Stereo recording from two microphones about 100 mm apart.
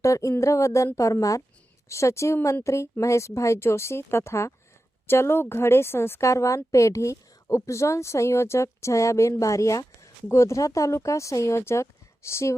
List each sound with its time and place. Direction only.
0.0 s speech: 30° left (ahead or behind)